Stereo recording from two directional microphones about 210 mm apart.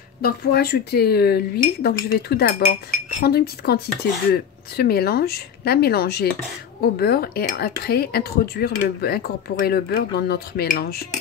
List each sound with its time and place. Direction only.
0.2 s speech: 50° left (ahead or behind)